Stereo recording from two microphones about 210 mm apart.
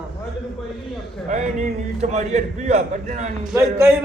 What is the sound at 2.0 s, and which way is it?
A man's voice, 35° right (ahead or behind).